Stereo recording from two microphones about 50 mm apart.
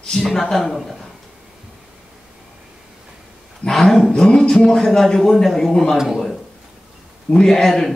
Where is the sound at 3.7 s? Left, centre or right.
Centre.